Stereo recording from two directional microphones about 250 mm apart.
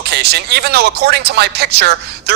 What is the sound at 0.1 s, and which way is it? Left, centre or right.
Speech, right.